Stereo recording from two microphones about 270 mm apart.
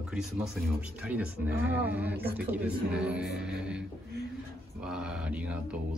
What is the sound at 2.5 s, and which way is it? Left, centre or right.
Mantra, centre.